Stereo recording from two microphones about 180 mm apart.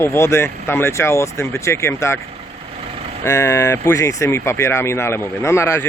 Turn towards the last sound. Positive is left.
turn(degrees=15)  # may be behind; listen again after turning